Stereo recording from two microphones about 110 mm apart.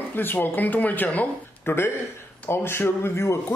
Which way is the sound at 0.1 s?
20° left (ahead or behind).